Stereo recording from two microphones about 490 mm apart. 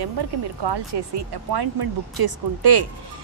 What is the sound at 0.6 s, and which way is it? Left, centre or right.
Speech, right.